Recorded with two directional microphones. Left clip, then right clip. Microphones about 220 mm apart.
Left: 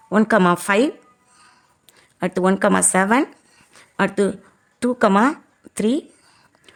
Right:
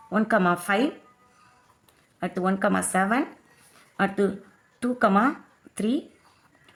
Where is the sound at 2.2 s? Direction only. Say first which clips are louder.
Left 7 dB; 50° left (ahead or behind).